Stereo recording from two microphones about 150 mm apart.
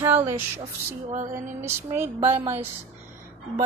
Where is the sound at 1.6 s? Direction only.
15° right (ahead or behind).